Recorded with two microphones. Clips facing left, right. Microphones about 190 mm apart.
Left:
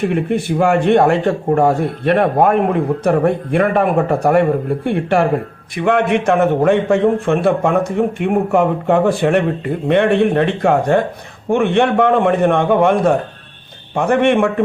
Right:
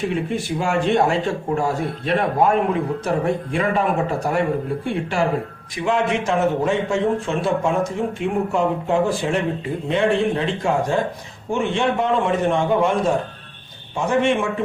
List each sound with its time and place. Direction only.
0.0 s a man's voice: 60° left (ahead or behind)